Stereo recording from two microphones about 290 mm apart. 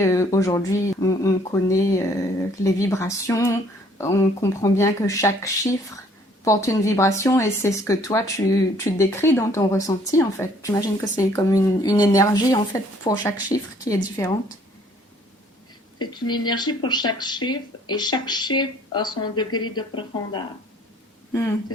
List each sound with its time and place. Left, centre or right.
0.0 s speech: centre
16.0 s speech: centre